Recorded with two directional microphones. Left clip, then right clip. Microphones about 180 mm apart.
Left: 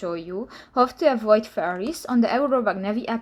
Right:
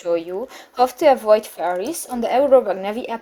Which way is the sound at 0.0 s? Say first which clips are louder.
Right 7 dB; 30° right (ahead or behind).